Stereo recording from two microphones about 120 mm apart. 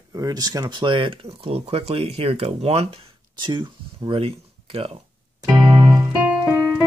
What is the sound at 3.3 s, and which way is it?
Speech, 40° right (ahead or behind).